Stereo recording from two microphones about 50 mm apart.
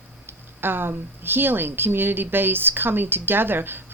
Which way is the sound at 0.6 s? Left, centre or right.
Right.